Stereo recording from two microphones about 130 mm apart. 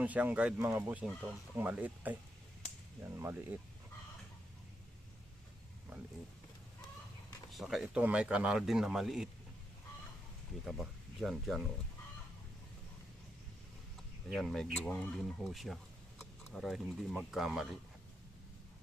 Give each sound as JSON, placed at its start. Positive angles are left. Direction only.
{"t": 0.0, "sound": "speech", "side_deg": -10}
{"t": 3.2, "sound": "speech", "side_deg": -15}
{"t": 7.5, "sound": "speech", "side_deg": 0}
{"t": 10.7, "sound": "speech", "side_deg": 0}
{"t": 14.3, "sound": "speech", "side_deg": 0}